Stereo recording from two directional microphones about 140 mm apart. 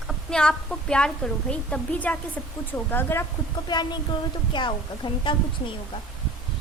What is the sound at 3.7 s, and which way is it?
A woman's voice, 30° left (ahead or behind).